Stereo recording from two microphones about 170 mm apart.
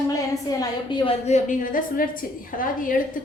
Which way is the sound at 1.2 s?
45° left (ahead or behind).